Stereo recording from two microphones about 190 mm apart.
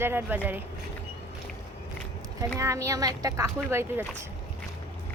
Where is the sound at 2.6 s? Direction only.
15° right (ahead or behind).